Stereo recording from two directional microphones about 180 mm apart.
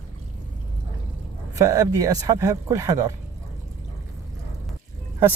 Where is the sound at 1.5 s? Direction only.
20° right (ahead or behind).